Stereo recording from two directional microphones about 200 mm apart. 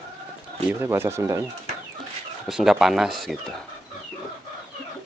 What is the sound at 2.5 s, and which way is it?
Speech, centre (ahead or behind).